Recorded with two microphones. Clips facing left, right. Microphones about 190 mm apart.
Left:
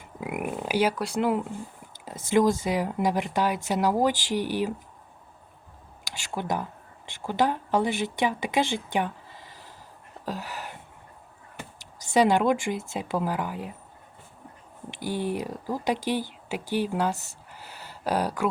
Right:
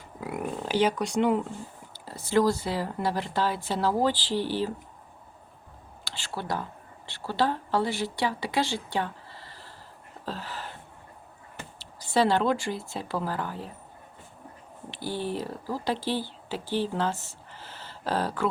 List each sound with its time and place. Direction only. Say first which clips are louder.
0.2 s speech: left 1 dB; 15° left (ahead or behind)
2.3 s speech: left 2 dB; 20° left (ahead or behind)
6.1 s a woman's voice: left 3 dB; 15° left (ahead or behind)
10.2 s a sound: left 2 dB; 10° left (ahead or behind)
13.0 s speech: left 3 dB; 15° left (ahead or behind)
14.9 s speech: left 2 dB; 15° left (ahead or behind)
17.5 s a sound: left 1 dB; 10° left (ahead or behind)